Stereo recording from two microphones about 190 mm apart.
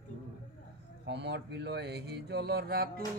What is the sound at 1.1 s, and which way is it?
Speech, 65° right (ahead or behind).